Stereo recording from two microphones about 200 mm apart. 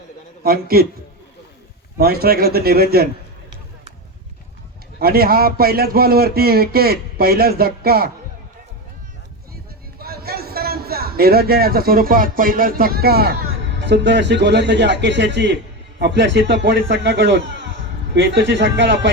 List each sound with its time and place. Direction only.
0.4 s a man's voice: 50° right (ahead or behind)
2.0 s a man's voice: 50° right (ahead or behind)
4.9 s a man's voice: 50° right (ahead or behind)
10.0 s a man's voice: 50° right (ahead or behind)